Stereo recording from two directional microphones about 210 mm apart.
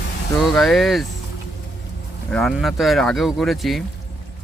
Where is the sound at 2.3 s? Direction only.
5° left (ahead or behind).